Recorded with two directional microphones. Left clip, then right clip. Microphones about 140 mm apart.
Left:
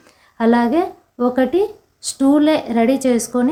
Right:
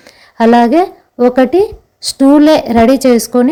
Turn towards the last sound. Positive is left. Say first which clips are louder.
# right 8 dB
turn(degrees=-45)  # may be behind; listen again after turning